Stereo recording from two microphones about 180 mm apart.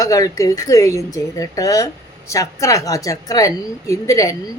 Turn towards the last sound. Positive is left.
turn(degrees=20)  # may be behind; listen again after turning